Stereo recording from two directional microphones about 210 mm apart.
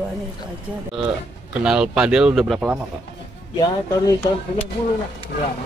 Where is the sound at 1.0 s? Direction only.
Centre (ahead or behind).